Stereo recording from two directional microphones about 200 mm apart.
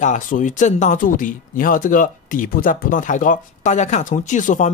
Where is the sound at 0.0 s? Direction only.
40° left (ahead or behind).